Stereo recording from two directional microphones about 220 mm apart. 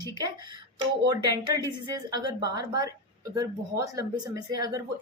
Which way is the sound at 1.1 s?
20° right (ahead or behind).